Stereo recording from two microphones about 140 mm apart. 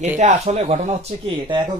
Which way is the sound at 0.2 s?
60° right (ahead or behind).